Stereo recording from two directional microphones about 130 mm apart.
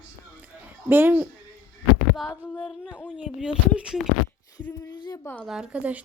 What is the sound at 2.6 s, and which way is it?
A woman's voice, 5° right (ahead or behind).